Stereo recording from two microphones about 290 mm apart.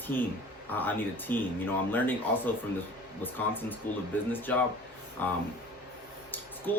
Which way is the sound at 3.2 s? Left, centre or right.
Centre.